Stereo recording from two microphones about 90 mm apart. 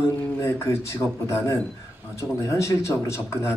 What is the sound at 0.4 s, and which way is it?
Speech, 30° left (ahead or behind).